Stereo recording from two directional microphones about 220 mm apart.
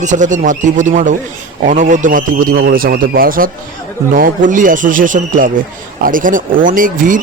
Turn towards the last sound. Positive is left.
turn(degrees=-35)  # may be behind; listen again after turning